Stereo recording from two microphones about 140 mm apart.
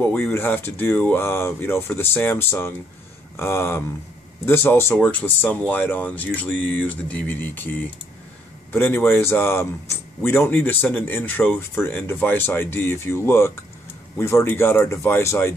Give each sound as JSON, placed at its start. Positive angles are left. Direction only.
{"t": 0.0, "sound": "speech", "side_deg": 15}